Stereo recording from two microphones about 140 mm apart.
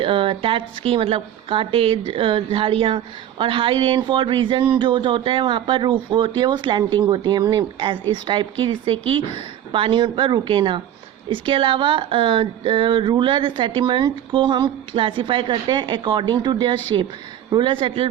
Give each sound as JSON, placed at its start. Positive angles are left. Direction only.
{"t": 0.0, "sound": "a woman's voice", "side_deg": -40}